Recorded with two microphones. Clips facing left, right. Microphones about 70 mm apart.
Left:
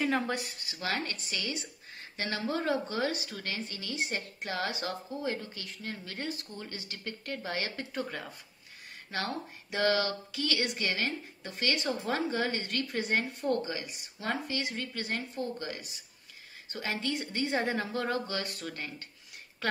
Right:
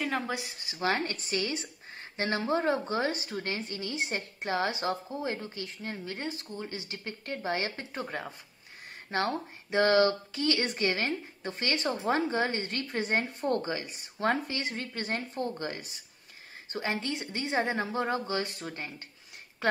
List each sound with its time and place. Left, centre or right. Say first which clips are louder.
0.0 s speech: left 2 dB; centre
0.7 s a woman's voice: right 5 dB; right
19.6 s a sound: right 4 dB; right